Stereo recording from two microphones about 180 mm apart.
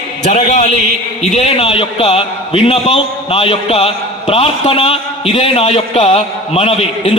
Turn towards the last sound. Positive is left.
turn(degrees=35)  # may be behind; listen again after turning